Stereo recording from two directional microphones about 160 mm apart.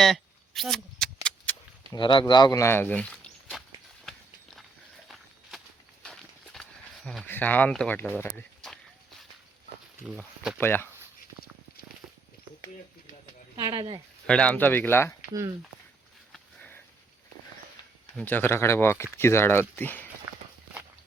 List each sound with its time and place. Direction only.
0.0 s a sound: centre (ahead or behind)
1.9 s speech: 30° left (ahead or behind); by 3.6 s 5° left (ahead or behind)
6.0 s walk: 5° left (ahead or behind)
7.3 s speech: 10° left (ahead or behind)
10.1 s speech: 5° right (ahead or behind)
10.6 s speech: 15° left (ahead or behind)
13.6 s speech: 30° right (ahead or behind)
14.3 s speech: 5° left (ahead or behind)
16.3 s sniff: 10° left (ahead or behind)
18.2 s speech: 10° left (ahead or behind)